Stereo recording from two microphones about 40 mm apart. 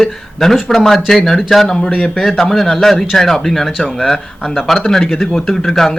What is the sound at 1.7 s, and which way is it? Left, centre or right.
Speech, centre.